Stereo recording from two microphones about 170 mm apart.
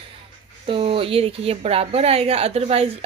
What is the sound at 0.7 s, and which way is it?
A woman's voice, 35° right (ahead or behind).